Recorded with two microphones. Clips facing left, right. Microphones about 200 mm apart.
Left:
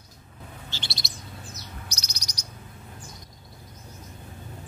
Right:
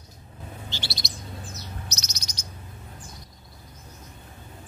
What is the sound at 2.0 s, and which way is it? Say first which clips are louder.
Bird: right 2 dB; 25° right (ahead or behind).